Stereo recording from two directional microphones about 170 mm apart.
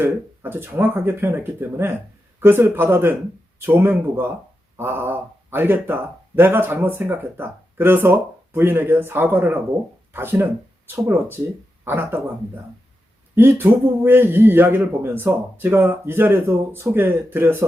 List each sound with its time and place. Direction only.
0.0 s speech: 15° right (ahead or behind)
13.3 s speech: 15° right (ahead or behind)